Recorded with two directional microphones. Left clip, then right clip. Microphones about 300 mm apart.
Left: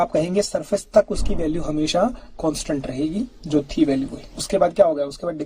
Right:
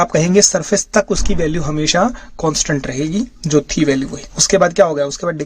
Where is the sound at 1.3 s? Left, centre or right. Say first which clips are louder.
Right 5 dB; right.